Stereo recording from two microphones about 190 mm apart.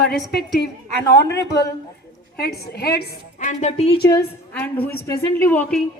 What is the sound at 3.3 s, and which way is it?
Speech, 40° left (ahead or behind).